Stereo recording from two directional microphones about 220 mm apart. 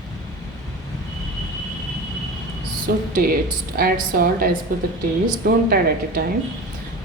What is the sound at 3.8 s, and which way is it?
Speech, 40° right (ahead or behind).